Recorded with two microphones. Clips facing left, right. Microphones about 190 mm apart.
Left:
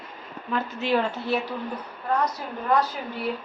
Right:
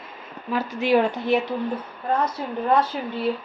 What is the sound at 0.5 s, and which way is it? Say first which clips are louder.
A woman's voice: right 4 dB; 15° right (ahead or behind).